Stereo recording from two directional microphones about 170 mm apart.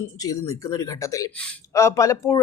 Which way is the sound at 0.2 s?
20° left (ahead or behind).